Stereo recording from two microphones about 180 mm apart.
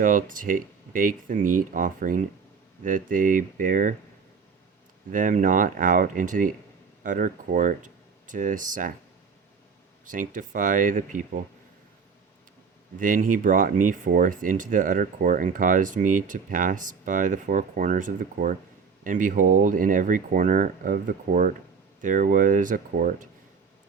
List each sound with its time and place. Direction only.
0.0 s speech: 50° right (ahead or behind)
5.1 s speech: 45° right (ahead or behind)
10.1 s speech: 45° right (ahead or behind)
13.0 s speech: 45° right (ahead or behind)